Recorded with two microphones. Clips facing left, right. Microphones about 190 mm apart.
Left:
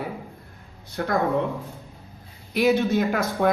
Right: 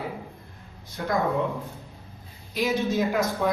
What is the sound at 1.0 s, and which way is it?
Speech, 60° left (ahead or behind).